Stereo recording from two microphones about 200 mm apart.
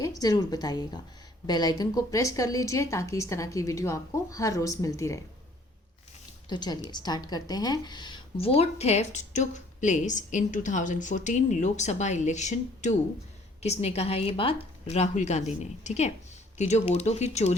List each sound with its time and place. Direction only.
0.0 s a woman's voice: 20° left (ahead or behind)
6.5 s a woman's voice: 20° left (ahead or behind)